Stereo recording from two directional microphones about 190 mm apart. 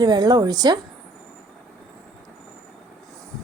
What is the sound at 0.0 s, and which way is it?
Speech, 20° right (ahead or behind).